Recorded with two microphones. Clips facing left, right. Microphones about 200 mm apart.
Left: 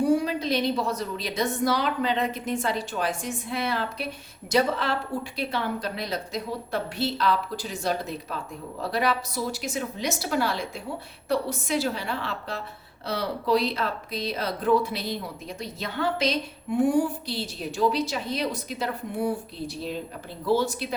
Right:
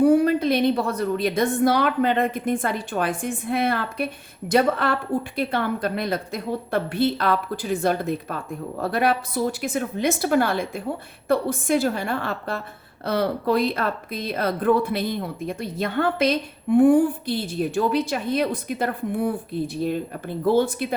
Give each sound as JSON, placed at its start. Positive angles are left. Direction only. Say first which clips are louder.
{"t": 0.0, "sound": "a woman's voice", "louder": "right 6 dB", "side_deg": -55}